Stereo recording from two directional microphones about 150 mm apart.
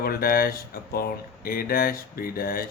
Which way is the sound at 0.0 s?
85° left.